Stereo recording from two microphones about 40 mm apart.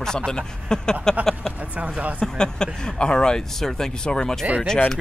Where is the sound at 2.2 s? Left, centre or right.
Centre.